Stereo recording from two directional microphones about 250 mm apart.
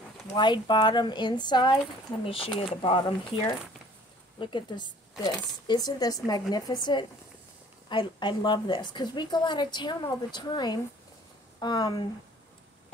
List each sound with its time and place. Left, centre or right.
0.3 s a woman's voice: centre